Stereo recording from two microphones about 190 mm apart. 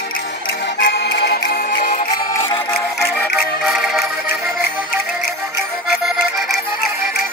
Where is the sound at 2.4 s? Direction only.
30° left (ahead or behind).